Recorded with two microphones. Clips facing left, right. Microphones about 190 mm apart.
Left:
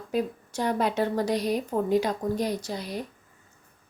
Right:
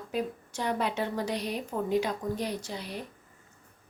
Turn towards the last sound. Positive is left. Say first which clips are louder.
# left 5 dB
turn(degrees=40)  # may be behind; listen again after turning